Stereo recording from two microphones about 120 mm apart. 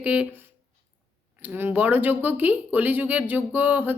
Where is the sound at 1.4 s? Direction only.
15° right (ahead or behind).